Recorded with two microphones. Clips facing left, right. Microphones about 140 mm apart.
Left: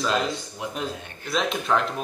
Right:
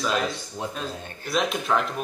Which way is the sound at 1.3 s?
Centre (ahead or behind).